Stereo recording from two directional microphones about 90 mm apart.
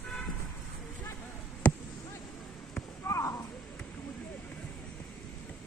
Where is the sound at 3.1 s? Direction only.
35° left (ahead or behind).